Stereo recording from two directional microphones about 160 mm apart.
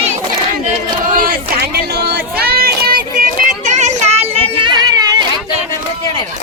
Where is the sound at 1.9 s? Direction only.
75° right (ahead or behind); by 5.0 s 25° right (ahead or behind).